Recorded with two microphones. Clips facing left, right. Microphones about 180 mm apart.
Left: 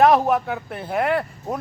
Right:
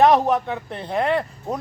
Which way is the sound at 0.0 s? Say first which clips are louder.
Even; centre (ahead or behind).